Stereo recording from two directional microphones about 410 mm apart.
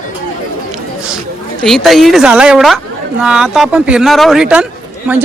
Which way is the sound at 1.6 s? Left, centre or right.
Centre.